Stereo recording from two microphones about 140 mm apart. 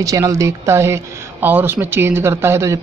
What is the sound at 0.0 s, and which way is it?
Speech, 25° right (ahead or behind).